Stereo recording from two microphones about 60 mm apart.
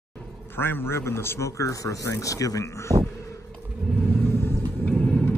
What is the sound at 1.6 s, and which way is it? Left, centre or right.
Speech, left.